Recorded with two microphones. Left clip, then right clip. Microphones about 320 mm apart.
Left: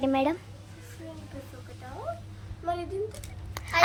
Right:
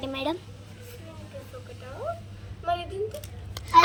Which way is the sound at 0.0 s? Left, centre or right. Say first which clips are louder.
Left 4 dB; centre.